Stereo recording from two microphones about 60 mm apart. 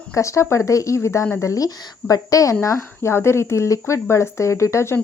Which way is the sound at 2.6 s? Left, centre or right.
Left.